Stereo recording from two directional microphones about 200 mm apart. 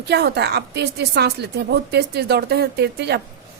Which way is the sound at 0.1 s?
55° right (ahead or behind).